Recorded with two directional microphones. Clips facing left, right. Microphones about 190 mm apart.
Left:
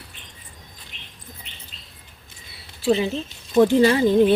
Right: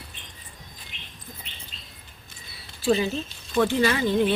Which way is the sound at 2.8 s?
25° left (ahead or behind).